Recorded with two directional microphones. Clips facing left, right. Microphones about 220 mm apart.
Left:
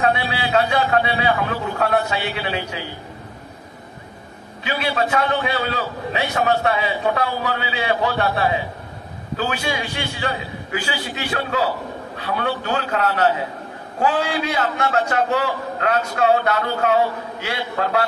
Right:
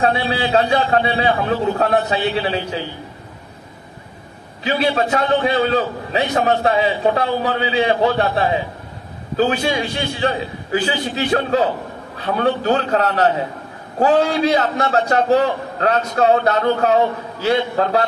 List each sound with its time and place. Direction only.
0.0 s a man's voice: 30° right (ahead or behind)
4.6 s a man's voice: 30° right (ahead or behind)